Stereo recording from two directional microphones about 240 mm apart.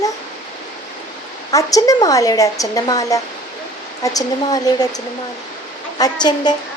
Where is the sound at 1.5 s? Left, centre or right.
Centre.